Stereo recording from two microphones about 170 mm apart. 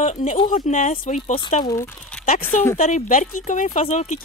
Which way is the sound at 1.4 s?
30° left (ahead or behind).